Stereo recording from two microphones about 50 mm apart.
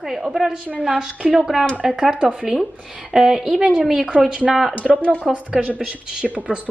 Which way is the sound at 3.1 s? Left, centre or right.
Centre.